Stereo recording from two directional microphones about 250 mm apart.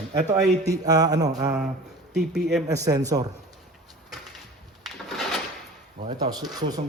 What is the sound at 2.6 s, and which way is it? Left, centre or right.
Mantra, centre.